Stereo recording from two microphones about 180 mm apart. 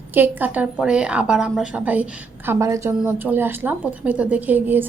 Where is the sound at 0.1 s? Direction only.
10° right (ahead or behind).